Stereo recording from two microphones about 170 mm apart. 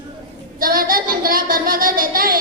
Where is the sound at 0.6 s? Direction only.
55° right (ahead or behind).